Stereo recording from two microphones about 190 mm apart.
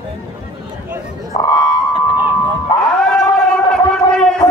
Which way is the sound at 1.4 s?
25° left (ahead or behind).